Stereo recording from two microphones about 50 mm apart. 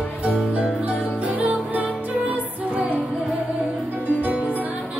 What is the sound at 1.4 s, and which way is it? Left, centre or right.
Music, right.